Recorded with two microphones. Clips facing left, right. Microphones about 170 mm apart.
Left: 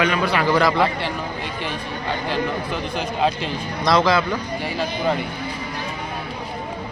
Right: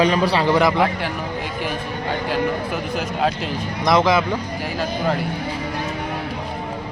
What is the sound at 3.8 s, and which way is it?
Speech, 20° right (ahead or behind).